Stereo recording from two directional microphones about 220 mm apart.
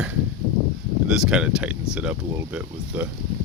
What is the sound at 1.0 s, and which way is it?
Speech, 5° right (ahead or behind).